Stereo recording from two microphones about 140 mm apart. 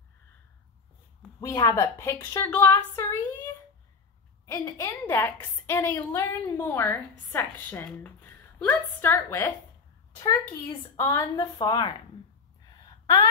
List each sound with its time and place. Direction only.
1.4 s a woman's voice: 25° left (ahead or behind)
4.5 s a woman's voice: 20° left (ahead or behind)
10.1 s a woman's voice: 25° left (ahead or behind)
11.5 s a woman's voice: 35° left (ahead or behind)